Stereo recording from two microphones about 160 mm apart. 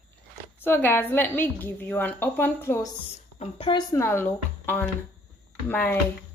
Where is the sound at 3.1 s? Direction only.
40° left (ahead or behind).